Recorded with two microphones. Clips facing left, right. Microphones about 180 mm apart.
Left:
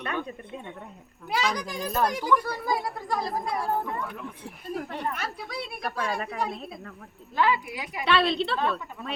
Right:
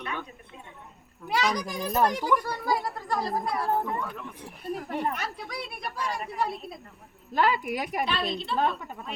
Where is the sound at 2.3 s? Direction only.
15° right (ahead or behind).